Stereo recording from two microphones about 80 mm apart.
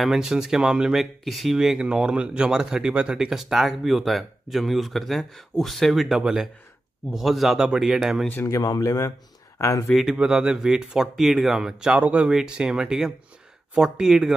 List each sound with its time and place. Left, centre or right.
0.0 s speech: centre
8.4 s speech: left
9.8 s speech: centre